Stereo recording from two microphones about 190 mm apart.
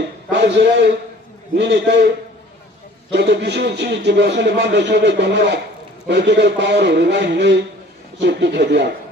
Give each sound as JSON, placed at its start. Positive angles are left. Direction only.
{"t": 0.3, "sound": "speech", "side_deg": -65}